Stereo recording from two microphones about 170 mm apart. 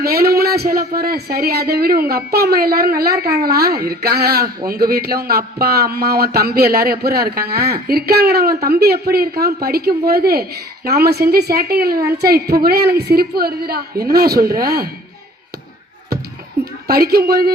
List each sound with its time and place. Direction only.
0.0 s a woman's voice: 65° right (ahead or behind)
16.8 s a woman's voice: 65° right (ahead or behind)